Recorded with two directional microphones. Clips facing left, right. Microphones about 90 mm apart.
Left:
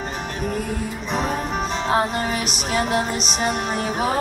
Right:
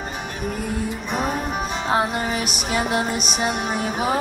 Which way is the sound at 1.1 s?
5° right (ahead or behind).